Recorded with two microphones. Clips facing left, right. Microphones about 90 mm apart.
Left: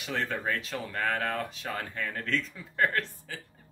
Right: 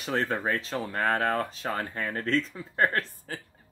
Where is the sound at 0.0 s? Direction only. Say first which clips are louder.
Right 4 dB; 35° right (ahead or behind).